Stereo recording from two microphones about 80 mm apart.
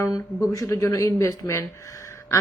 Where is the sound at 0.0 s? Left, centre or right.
Left.